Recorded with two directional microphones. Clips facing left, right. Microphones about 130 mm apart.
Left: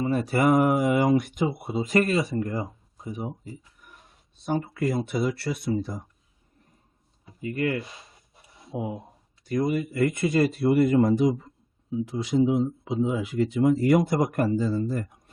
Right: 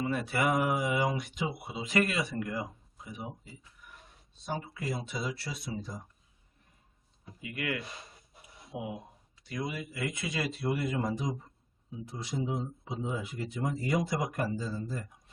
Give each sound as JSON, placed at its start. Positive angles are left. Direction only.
{"t": 0.0, "sound": "mantra", "side_deg": 40}
{"t": 0.3, "sound": "speech", "side_deg": 50}
{"t": 4.4, "sound": "speech", "side_deg": 55}
{"t": 7.4, "sound": "speech", "side_deg": 40}
{"t": 9.4, "sound": "speech", "side_deg": 50}
{"t": 11.9, "sound": "speech", "side_deg": 90}